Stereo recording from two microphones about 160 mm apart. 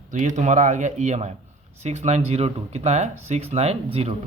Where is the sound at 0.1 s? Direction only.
50° right (ahead or behind).